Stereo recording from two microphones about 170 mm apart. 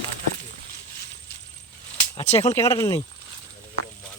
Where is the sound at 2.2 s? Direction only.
40° left (ahead or behind).